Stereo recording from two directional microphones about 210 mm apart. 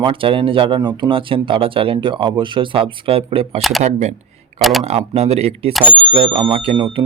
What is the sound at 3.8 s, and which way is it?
Speech, 35° right (ahead or behind).